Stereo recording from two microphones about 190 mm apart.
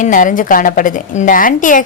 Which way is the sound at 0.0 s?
45° left (ahead or behind).